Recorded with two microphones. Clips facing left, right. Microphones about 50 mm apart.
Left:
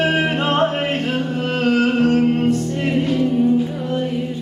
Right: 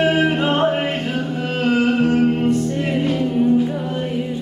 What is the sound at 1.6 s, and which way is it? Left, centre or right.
Music, centre.